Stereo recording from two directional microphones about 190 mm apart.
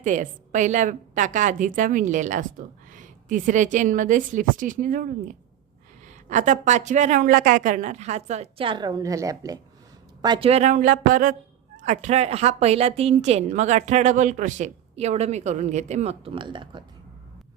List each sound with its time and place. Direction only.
0.0 s a woman's voice: 40° right (ahead or behind); by 16.8 s 25° right (ahead or behind)